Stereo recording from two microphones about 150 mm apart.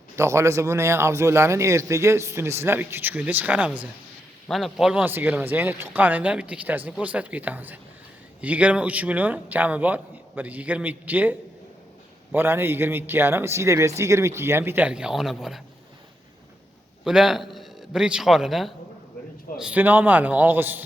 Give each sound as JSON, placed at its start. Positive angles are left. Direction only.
{"t": 0.2, "sound": "a man's voice", "side_deg": -20}
{"t": 17.0, "sound": "a man's voice", "side_deg": -5}